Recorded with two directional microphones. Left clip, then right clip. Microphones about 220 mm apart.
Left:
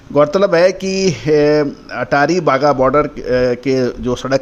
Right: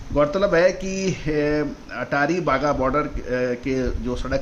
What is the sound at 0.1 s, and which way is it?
Speech, 45° left (ahead or behind).